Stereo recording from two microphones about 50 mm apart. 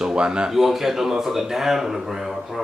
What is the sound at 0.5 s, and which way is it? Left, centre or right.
Speech, centre.